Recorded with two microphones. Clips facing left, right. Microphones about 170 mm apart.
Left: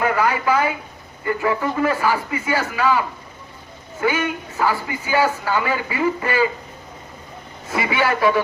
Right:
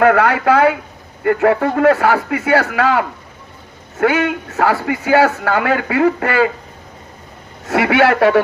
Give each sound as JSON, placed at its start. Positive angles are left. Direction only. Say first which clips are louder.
{"t": 0.0, "sound": "speech", "louder": "right 7 dB", "side_deg": -70}
{"t": 7.7, "sound": "speech", "louder": "right 8 dB", "side_deg": -75}